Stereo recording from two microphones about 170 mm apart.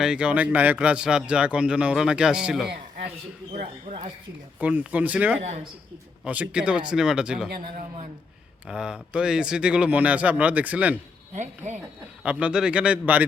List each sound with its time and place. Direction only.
0.0 s speech: 5° right (ahead or behind)
3.5 s speech: 45° right (ahead or behind)
4.6 s a man's voice: 10° right (ahead or behind)
8.6 s speech: 5° right (ahead or behind)
11.3 s speech: 45° right (ahead or behind)
12.2 s a man's voice: 5° right (ahead or behind)